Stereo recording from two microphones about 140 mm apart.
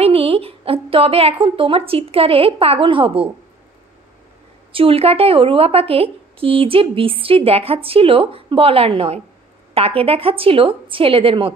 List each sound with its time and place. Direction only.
0.0 s a woman's voice: 45° right (ahead or behind)
4.7 s a woman's voice: 45° right (ahead or behind)